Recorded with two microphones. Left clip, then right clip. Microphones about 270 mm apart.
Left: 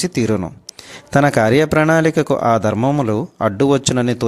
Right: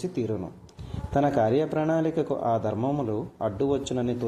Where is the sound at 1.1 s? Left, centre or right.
Left.